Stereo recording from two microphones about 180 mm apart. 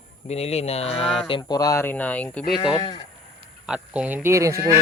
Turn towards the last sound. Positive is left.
turn(degrees=-15)  # may be behind; listen again after turning